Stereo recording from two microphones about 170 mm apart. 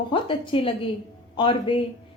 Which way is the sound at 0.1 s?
30° left (ahead or behind).